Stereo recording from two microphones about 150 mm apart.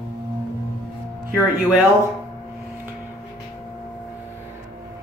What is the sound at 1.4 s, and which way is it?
Speech, 10° right (ahead or behind).